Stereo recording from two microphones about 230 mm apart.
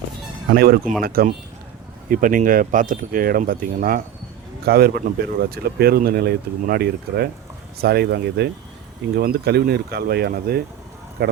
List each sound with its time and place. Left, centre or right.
0.5 s speech: right